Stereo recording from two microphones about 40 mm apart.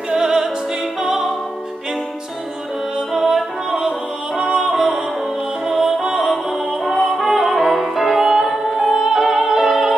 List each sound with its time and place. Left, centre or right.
0.1 s opera: centre
0.9 s music: centre
3.1 s music: centre
4.4 s music: right
4.6 s music: centre
8.2 s opera: centre